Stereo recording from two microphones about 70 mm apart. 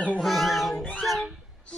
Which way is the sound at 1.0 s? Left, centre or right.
Centre.